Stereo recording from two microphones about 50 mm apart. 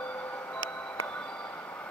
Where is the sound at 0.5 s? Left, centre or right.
Left.